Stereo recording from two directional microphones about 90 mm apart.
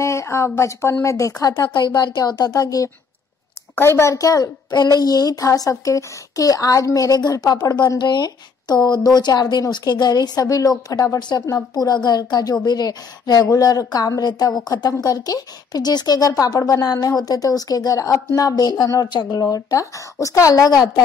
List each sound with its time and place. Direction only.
0.0 s a woman's voice: 35° left (ahead or behind)
1.7 s speech: 55° left (ahead or behind); by 2.9 s 40° left (ahead or behind)
3.7 s a woman's voice: 25° left (ahead or behind)
11.1 s speech: 55° left (ahead or behind)
19.4 s a woman's voice: 35° left (ahead or behind)